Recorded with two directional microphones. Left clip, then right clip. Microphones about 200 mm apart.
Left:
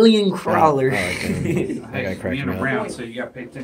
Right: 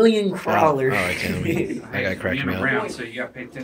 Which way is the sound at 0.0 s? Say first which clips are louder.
Left 2 dB; 60° left (ahead or behind).